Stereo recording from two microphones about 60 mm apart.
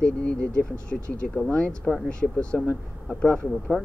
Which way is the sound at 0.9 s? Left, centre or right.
Centre.